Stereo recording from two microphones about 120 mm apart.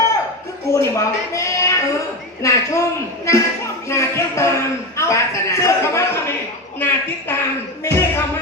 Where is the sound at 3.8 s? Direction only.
25° left (ahead or behind).